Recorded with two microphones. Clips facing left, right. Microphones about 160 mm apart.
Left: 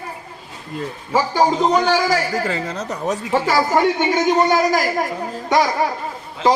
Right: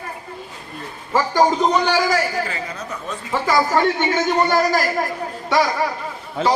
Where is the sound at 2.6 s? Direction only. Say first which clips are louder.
Left 7 dB; 80° left.